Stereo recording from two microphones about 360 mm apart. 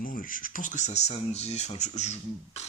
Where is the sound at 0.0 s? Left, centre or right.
Left.